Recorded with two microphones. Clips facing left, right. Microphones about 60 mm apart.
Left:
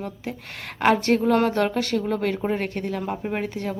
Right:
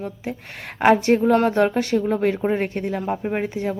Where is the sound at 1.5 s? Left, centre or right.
Centre.